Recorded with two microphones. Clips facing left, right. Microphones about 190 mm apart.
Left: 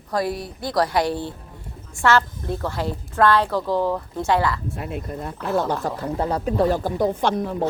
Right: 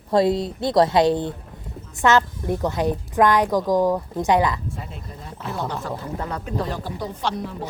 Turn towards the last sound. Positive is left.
turn(degrees=50)  # may be behind; listen again after turning